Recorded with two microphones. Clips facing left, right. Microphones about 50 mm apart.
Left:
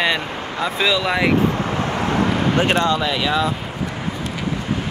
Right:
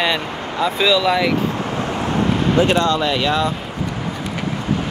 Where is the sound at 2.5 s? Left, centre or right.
Left.